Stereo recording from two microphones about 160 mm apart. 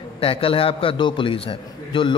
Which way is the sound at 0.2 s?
35° left (ahead or behind).